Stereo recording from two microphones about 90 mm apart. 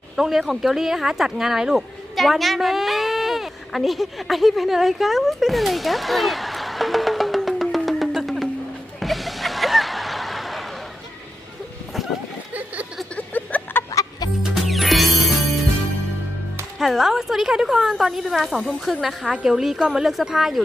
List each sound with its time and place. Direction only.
0.2 s speech: 5° right (ahead or behind)
9.0 s a sound: centre (ahead or behind)
13.1 s a sound: 20° left (ahead or behind)
13.9 s music: 45° left (ahead or behind)
14.4 s music: centre (ahead or behind)
16.7 s a woman's voice: 5° right (ahead or behind)